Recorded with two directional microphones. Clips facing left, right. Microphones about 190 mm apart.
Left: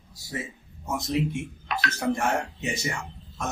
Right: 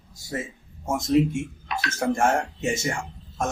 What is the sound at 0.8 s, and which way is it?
Speech, 45° right (ahead or behind).